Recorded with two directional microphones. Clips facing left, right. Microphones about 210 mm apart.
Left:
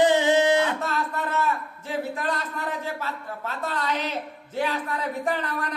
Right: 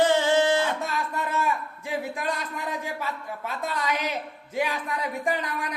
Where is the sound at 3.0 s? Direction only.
10° right (ahead or behind).